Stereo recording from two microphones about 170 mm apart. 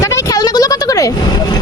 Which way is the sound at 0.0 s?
20° left (ahead or behind).